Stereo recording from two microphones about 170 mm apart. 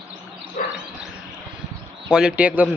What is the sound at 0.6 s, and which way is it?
Dog, 50° left (ahead or behind).